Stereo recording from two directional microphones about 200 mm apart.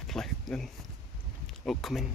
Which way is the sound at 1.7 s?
Centre (ahead or behind).